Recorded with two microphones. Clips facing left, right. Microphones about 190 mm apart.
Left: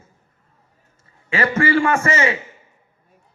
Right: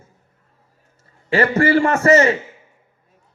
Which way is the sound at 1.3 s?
35° right (ahead or behind).